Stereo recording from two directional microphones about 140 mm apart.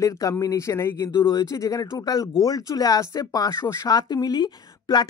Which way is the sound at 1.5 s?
25° left (ahead or behind).